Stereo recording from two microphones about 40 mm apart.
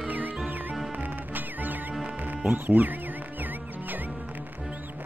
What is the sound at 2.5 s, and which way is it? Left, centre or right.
Speech, right.